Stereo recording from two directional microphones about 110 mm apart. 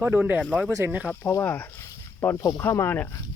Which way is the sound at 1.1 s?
25° left (ahead or behind).